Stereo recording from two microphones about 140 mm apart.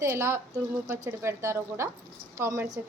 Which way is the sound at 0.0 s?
20° right (ahead or behind).